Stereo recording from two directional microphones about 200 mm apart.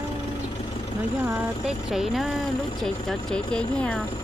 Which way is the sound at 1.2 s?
10° right (ahead or behind).